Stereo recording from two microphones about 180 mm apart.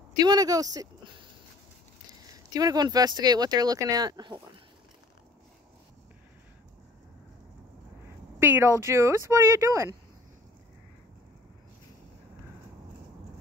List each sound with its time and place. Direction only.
0.2 s speech: 20° right (ahead or behind)
2.3 s speech: 20° right (ahead or behind)
8.4 s speech: 15° right (ahead or behind)